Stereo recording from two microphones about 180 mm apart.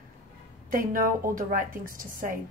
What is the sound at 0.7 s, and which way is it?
Speech, 50° right (ahead or behind).